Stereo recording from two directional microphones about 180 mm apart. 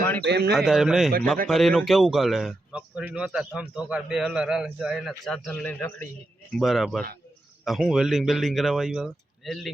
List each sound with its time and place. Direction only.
0.3 s a man's voice: 65° right (ahead or behind)
0.5 s a man's voice: centre (ahead or behind)